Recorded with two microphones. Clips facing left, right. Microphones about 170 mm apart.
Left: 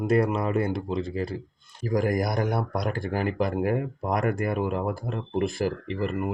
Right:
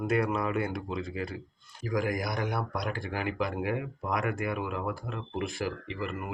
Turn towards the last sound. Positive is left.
turn(degrees=40)  # may be behind; listen again after turning